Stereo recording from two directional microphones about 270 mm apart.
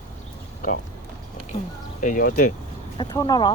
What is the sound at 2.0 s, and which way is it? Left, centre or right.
Speech, left.